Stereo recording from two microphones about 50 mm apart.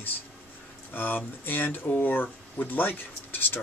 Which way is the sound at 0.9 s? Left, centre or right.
Left.